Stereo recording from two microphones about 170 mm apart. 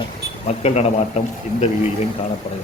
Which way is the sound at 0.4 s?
40° left (ahead or behind).